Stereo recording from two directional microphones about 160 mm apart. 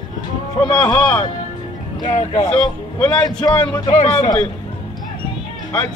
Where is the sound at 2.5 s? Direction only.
5° left (ahead or behind).